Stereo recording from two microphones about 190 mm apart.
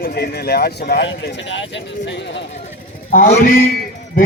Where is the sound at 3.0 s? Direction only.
50° left (ahead or behind).